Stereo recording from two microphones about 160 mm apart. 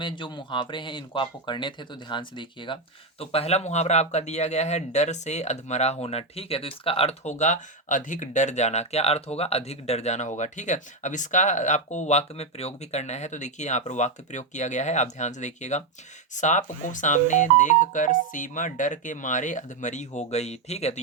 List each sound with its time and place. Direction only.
0.0 s speech: 30° left (ahead or behind)